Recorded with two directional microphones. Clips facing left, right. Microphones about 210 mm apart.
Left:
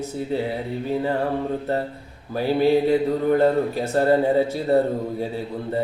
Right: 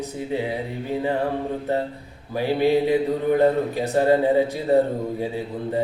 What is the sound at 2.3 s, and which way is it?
Speech, 15° right (ahead or behind).